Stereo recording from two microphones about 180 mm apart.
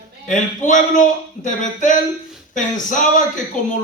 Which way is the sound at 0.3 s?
45° left (ahead or behind).